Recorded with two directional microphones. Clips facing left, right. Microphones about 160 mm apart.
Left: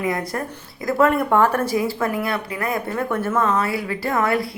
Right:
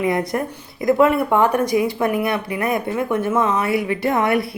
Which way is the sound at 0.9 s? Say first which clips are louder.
Right 2 dB; 10° right (ahead or behind).